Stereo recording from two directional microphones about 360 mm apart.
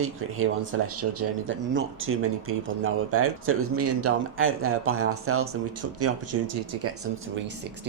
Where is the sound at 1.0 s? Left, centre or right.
Right.